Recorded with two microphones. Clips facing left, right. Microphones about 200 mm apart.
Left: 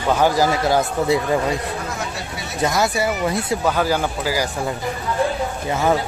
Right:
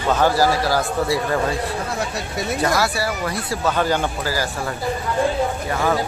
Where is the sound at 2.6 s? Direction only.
20° left (ahead or behind).